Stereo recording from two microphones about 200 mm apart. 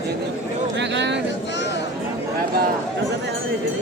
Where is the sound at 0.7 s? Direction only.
60° right (ahead or behind).